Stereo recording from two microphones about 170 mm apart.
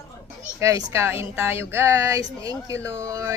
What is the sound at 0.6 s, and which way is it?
Speech, 15° right (ahead or behind).